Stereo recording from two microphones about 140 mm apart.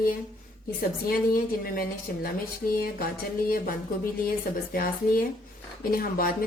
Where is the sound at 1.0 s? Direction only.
90° left.